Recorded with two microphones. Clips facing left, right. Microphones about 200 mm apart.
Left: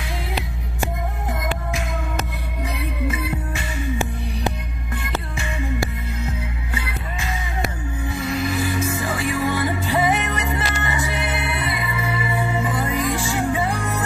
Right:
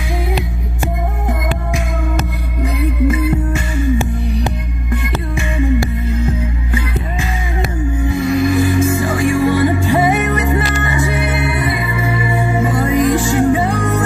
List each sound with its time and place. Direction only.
8.4 s music: 50° right (ahead or behind)
11.6 s music: 50° right (ahead or behind)
12.9 s music: 15° right (ahead or behind)
13.2 s music: 55° right (ahead or behind)